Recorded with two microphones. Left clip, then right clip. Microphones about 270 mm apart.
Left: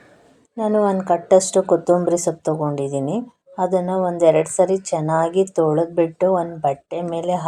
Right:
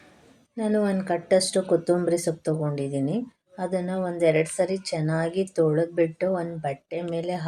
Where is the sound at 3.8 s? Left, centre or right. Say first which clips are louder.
Left 9 dB; left.